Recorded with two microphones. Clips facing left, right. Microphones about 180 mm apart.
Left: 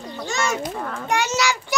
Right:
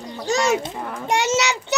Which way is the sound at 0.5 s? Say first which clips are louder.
Right 2 dB; 20° right (ahead or behind).